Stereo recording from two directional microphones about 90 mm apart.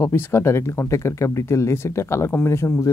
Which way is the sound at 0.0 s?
25° left (ahead or behind).